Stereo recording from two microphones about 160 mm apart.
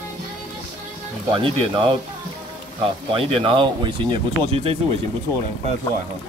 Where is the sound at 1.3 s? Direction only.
30° right (ahead or behind).